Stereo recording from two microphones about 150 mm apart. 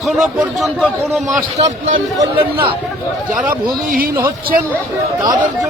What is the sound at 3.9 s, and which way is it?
Speech, 70° right (ahead or behind).